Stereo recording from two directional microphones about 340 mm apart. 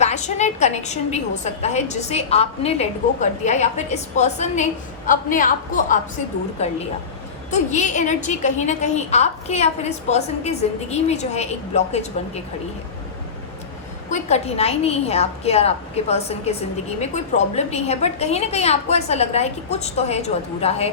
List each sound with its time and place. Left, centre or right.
0.0 s a woman's voice: centre
14.1 s a woman's voice: centre